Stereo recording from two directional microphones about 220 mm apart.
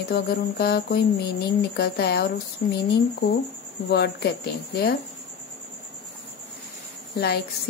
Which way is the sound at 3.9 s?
45° left (ahead or behind).